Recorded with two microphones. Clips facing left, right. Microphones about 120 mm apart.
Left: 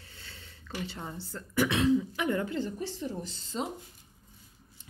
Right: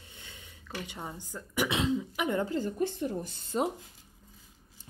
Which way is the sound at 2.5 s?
45° right (ahead or behind).